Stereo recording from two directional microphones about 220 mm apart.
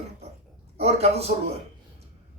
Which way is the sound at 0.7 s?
25° right (ahead or behind).